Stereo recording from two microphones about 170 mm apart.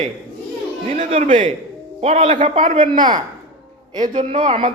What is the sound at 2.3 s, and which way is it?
Speech, 50° right (ahead or behind).